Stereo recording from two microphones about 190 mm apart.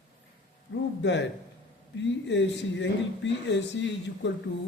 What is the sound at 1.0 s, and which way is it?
Speech, 65° left (ahead or behind).